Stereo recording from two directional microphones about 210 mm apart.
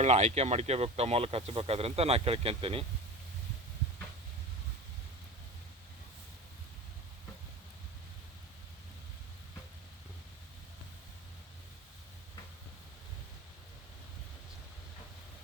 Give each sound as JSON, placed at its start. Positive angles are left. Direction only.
{"t": 0.0, "sound": "speech", "side_deg": -35}